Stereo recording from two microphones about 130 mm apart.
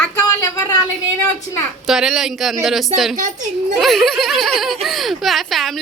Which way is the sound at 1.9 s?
5° right (ahead or behind).